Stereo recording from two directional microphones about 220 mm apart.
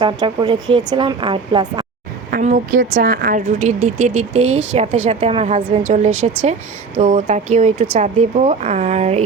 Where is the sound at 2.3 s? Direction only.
35° right (ahead or behind).